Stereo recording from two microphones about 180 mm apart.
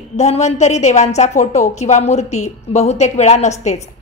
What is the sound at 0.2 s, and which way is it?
A woman's voice, 35° left (ahead or behind).